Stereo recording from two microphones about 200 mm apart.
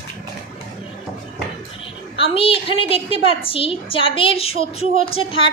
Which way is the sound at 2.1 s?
25° left (ahead or behind).